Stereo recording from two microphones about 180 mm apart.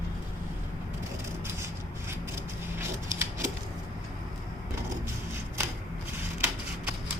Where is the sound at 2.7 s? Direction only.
15° right (ahead or behind).